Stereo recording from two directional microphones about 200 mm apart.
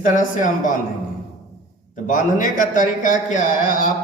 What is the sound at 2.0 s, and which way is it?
A man's voice, 40° left (ahead or behind).